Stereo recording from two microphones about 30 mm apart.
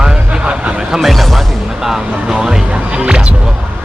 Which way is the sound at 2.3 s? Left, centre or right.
Centre.